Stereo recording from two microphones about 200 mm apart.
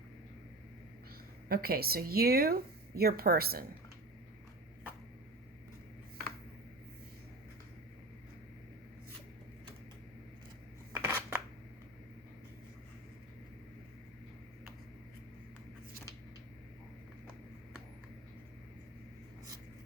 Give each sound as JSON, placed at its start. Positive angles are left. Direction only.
{"t": 1.5, "sound": "speech", "side_deg": -50}
{"t": 10.9, "sound": "scissors", "side_deg": -10}